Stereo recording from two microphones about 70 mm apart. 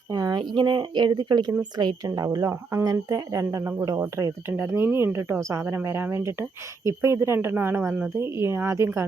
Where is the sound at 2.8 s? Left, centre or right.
Right.